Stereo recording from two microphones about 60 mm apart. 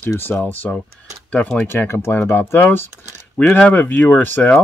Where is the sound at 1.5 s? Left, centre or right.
Left.